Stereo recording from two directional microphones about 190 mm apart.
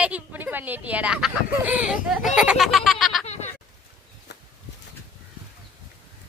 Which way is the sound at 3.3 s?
35° left (ahead or behind).